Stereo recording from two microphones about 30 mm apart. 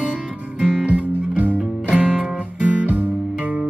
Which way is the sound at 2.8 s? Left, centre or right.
Right.